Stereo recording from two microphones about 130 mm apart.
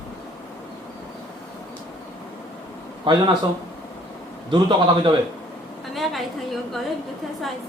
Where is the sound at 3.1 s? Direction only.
40° right (ahead or behind).